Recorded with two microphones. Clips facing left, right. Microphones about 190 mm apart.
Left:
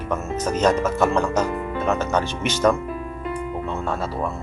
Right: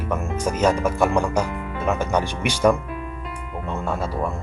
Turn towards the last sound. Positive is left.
turn(degrees=-10)  # may be behind; listen again after turning